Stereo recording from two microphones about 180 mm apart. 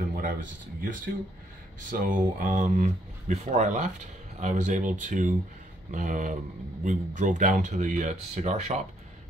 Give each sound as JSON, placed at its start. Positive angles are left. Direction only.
{"t": 0.7, "sound": "speech", "side_deg": -45}